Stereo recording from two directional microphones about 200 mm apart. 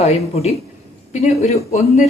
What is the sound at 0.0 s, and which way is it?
Speech, 30° left (ahead or behind).